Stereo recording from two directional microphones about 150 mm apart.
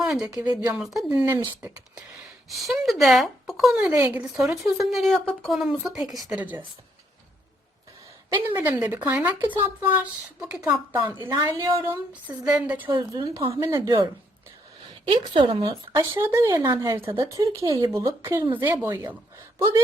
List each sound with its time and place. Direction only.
0.0 s a sound: 5° right (ahead or behind)
0.7 s speech: centre (ahead or behind)
1.2 s speech: 20° right (ahead or behind)
1.6 s speech: 10° right (ahead or behind)
6.4 s speech: 10° right (ahead or behind)
8.4 s speech: 10° right (ahead or behind)
11.2 s speech: 25° right (ahead or behind)
12.5 s speech: 10° right (ahead or behind)
12.8 s a woman's voice: 30° right (ahead or behind)
15.7 s speech: 15° right (ahead or behind)